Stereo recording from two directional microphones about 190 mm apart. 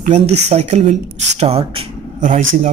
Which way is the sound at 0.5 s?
35° right (ahead or behind).